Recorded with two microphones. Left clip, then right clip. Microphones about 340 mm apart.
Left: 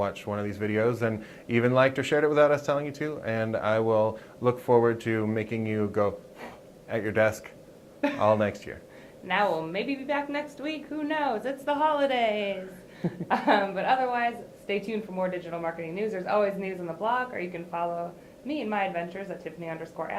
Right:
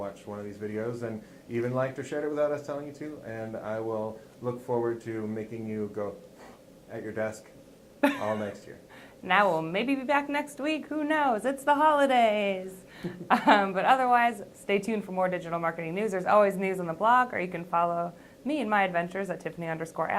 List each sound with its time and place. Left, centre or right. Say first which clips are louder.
0.0 s speech: left 7 dB; left
8.0 s a woman's voice: right 3 dB; right
9.2 s a woman's voice: right 2 dB; right